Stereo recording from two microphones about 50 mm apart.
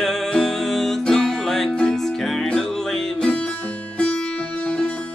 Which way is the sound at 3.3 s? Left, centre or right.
Left.